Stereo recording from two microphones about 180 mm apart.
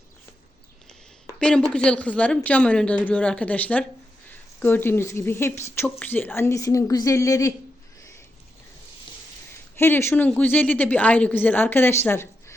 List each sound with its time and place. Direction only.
1.4 s a woman's voice: 5° left (ahead or behind)
9.7 s a woman's voice: 15° left (ahead or behind)